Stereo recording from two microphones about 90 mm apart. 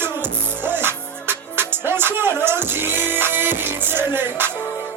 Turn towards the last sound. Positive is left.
turn(degrees=-25)  # may be behind; listen again after turning